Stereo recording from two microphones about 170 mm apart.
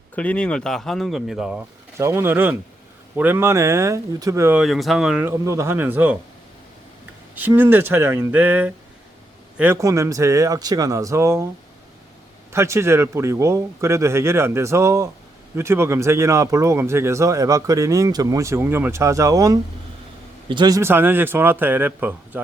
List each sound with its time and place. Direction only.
0.2 s speech: 5° left (ahead or behind)
2.0 s speech: 15° right (ahead or behind)
4.6 s speech: centre (ahead or behind)
5.2 s speech: 15° right (ahead or behind)
7.3 s speech: 10° right (ahead or behind)
12.5 s speech: 15° right (ahead or behind)